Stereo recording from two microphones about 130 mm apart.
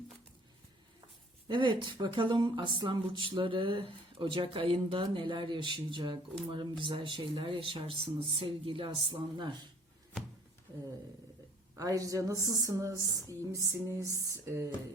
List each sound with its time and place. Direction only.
1.5 s speech: 35° right (ahead or behind)
11.8 s speech: 25° right (ahead or behind)